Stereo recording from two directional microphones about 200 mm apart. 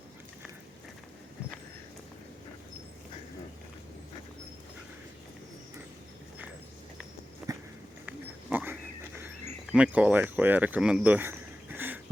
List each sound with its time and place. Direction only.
7.4 s walk: 5° right (ahead or behind)
8.0 s dog: 10° right (ahead or behind)
9.7 s speech: 5° right (ahead or behind)